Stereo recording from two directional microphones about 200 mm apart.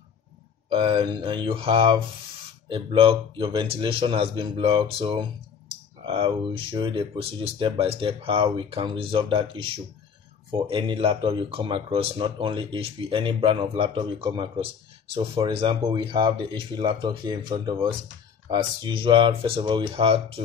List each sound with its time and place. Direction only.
0.7 s speech: 25° right (ahead or behind)